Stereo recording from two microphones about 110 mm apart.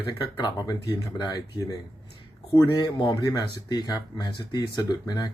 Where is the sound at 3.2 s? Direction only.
35° left (ahead or behind).